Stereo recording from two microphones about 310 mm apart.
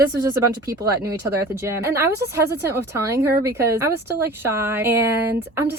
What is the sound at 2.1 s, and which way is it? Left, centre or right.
Speech, right.